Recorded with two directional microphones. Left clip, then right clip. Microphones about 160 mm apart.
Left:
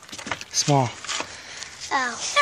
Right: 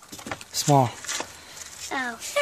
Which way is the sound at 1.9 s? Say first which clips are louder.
Left 6 dB; 55° right (ahead or behind).